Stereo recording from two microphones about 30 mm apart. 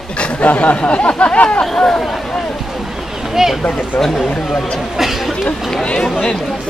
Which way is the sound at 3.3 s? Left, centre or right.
Centre.